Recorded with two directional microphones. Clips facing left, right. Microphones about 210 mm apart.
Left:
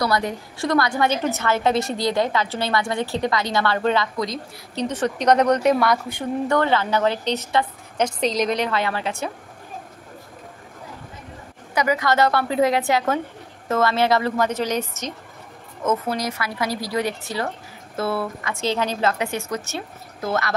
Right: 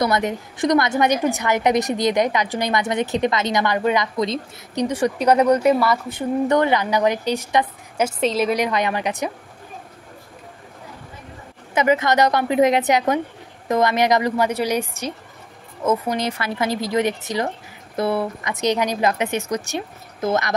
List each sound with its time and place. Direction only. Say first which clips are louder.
0.0 s a woman's voice: right 2 dB; 20° right (ahead or behind); by 6.2 s 5° right (ahead or behind)
6.5 s a woman's voice: even; 15° right (ahead or behind)
11.7 s a woman's voice: right 3 dB; 25° right (ahead or behind)
16.2 s a woman's voice: right 3 dB; 25° right (ahead or behind)